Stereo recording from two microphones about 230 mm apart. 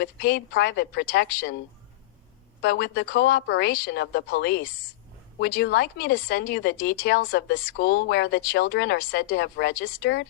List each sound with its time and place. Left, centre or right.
0.0 s speech: left
2.6 s speech: left